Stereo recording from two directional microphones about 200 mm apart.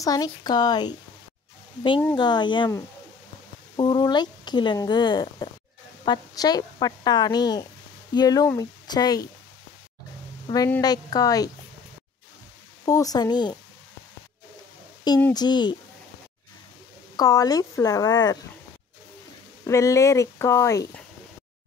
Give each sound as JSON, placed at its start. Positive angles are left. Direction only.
{"t": 0.0, "sound": "speech", "side_deg": 20}
{"t": 2.1, "sound": "speech", "side_deg": 20}
{"t": 10.5, "sound": "speech", "side_deg": 20}
{"t": 12.8, "sound": "speech", "side_deg": 15}
{"t": 15.3, "sound": "speech", "side_deg": 20}
{"t": 17.2, "sound": "speech", "side_deg": 20}
{"t": 19.6, "sound": "speech", "side_deg": 15}